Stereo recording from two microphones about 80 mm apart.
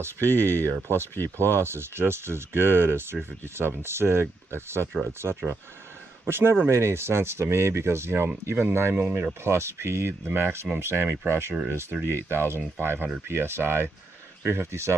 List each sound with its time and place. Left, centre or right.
0.0 s speech: right